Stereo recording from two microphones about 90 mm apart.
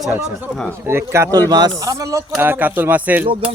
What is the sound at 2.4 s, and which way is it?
Speech, 20° right (ahead or behind).